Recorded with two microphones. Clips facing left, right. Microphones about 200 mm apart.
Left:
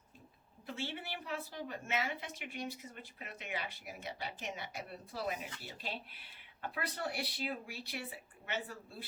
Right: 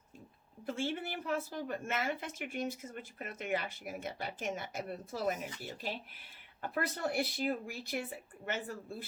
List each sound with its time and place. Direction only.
0.6 s a woman's voice: 45° right (ahead or behind)